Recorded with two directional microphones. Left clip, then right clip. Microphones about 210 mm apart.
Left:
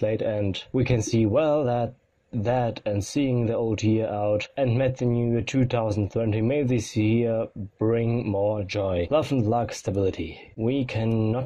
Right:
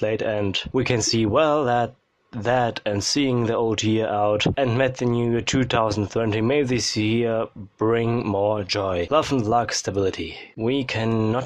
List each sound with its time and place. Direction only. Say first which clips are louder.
0.0 s speech: right 2 dB; 10° right (ahead or behind)